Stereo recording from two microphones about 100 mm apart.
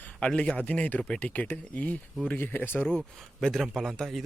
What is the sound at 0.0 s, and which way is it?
Speech, 10° left (ahead or behind).